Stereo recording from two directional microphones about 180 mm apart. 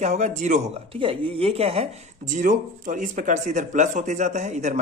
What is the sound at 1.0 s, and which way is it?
A man's voice, 30° right (ahead or behind).